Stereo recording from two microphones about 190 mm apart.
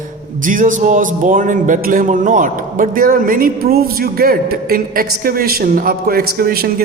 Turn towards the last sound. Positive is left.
turn(degrees=-55)  # may be behind; listen again after turning